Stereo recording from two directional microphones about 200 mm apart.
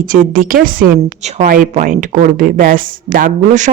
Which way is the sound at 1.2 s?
35° right (ahead or behind).